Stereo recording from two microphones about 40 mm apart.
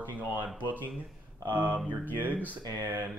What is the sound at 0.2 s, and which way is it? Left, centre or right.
Speech, right.